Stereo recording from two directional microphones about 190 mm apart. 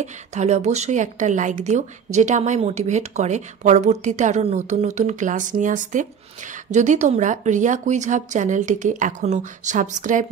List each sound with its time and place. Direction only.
0.0 s a woman's voice: 35° right (ahead or behind)